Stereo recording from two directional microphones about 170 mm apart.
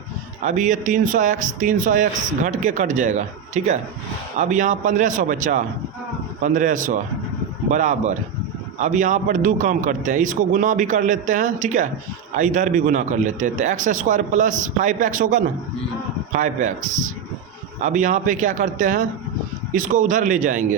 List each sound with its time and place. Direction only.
0.4 s speech: 45° right (ahead or behind)